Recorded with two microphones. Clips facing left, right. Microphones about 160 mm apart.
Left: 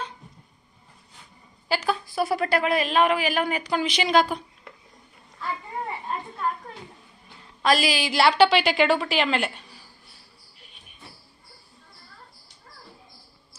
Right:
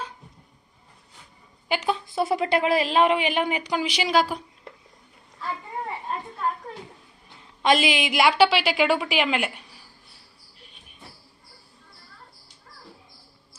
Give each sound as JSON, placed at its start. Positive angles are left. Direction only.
{"t": 1.6, "sound": "a woman's voice", "side_deg": -20}
{"t": 7.6, "sound": "a woman's voice", "side_deg": -20}